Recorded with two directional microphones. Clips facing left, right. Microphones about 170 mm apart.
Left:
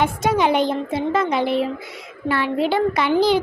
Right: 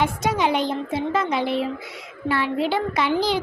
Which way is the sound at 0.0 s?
55° left (ahead or behind).